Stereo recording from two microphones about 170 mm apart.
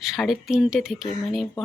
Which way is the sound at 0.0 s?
Centre (ahead or behind).